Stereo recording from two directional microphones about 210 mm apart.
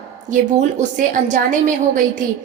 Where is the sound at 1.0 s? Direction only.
40° right (ahead or behind).